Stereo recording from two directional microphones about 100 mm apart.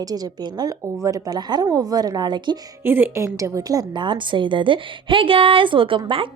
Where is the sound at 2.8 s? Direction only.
20° right (ahead or behind).